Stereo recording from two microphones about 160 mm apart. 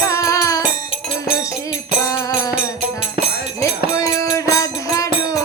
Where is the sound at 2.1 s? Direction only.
20° left (ahead or behind).